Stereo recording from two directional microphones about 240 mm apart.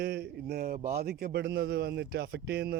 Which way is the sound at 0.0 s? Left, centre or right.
Right.